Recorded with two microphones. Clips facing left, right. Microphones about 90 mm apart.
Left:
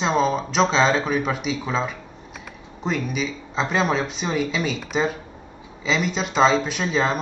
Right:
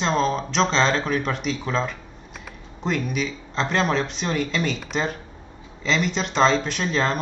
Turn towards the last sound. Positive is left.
turn(degrees=5)  # may be behind; listen again after turning